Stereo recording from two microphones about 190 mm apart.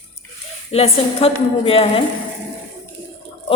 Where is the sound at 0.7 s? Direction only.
30° left (ahead or behind).